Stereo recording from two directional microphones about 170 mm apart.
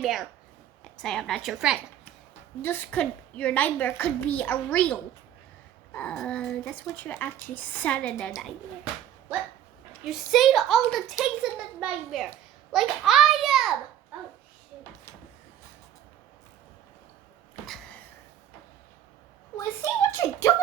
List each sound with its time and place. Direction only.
0.0 s a woman's voice: centre (ahead or behind)
2.6 s a woman's voice: 15° left (ahead or behind)
10.0 s a woman's voice: centre (ahead or behind)
17.7 s a sound: centre (ahead or behind)
19.5 s a woman's voice: 20° left (ahead or behind)